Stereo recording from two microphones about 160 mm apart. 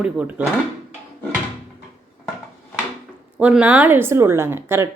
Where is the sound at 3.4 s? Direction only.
10° right (ahead or behind).